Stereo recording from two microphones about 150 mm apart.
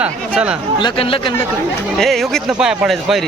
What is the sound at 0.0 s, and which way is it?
Speech, 10° right (ahead or behind).